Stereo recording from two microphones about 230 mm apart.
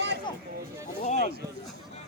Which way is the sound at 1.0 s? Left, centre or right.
Left.